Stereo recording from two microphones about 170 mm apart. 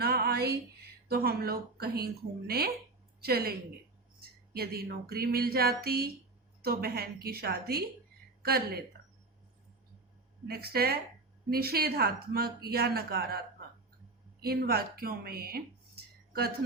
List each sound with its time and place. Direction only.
0.0 s music: 70° right (ahead or behind)
1.0 s a woman's voice: 65° right (ahead or behind)
4.5 s speech: 65° right (ahead or behind)
10.4 s speech: 65° right (ahead or behind)
14.4 s speech: 65° right (ahead or behind)